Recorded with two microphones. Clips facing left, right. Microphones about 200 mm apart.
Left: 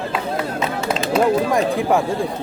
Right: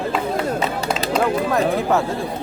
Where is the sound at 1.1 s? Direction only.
15° left (ahead or behind).